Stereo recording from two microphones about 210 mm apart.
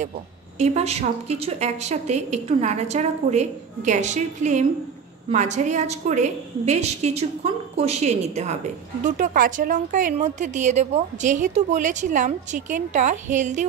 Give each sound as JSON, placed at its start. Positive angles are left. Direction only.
{"t": 0.6, "sound": "a woman's voice", "side_deg": -30}